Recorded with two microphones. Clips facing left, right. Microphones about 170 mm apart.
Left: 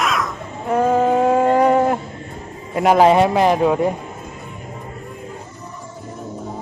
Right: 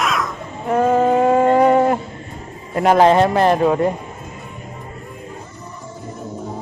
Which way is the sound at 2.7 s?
5° left (ahead or behind).